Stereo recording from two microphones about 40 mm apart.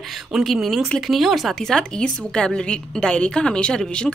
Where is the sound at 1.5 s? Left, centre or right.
Centre.